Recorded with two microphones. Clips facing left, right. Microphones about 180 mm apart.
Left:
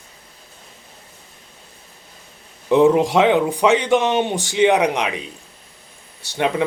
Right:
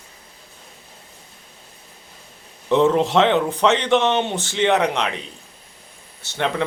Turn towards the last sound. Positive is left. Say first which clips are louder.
# left 3 dB
turn(degrees=10)  # may be behind; listen again after turning